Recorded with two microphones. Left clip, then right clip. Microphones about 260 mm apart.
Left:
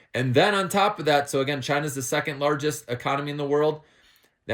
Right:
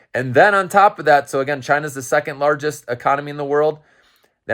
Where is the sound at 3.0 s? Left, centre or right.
Centre.